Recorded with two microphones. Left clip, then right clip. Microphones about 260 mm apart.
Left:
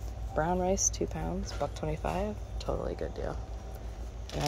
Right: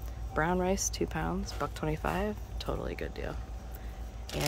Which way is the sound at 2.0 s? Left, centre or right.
Right.